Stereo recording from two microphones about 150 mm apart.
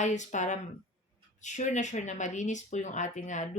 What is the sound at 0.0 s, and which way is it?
Speech, 55° left (ahead or behind).